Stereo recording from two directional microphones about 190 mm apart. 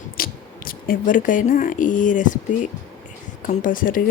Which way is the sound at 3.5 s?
45° left (ahead or behind).